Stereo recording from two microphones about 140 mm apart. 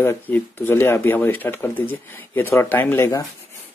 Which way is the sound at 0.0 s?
15° left (ahead or behind).